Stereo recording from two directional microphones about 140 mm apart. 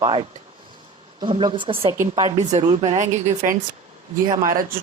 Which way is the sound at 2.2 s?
55° right (ahead or behind).